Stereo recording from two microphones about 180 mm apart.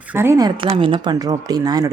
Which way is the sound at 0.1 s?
15° right (ahead or behind).